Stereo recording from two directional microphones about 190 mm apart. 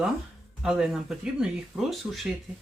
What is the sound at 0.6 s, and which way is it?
Speech, 5° right (ahead or behind).